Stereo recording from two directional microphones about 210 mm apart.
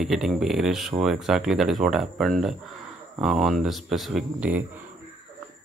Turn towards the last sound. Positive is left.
turn(degrees=-5)  # may be behind; listen again after turning